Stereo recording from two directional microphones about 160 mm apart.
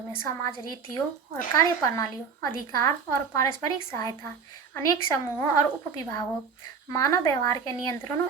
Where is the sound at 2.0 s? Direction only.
20° left (ahead or behind).